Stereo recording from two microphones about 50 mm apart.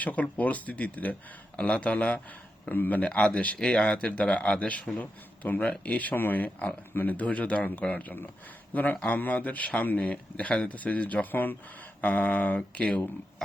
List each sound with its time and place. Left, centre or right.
0.0 s a man's voice: left
3.0 s a man's voice: left